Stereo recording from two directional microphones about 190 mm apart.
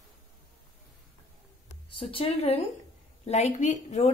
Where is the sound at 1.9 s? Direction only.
25° left (ahead or behind).